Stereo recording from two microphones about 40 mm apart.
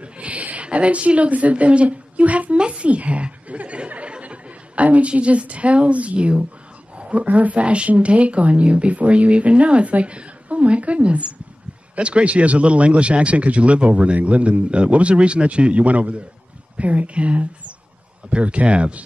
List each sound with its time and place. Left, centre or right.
0.0 s a woman's voice: right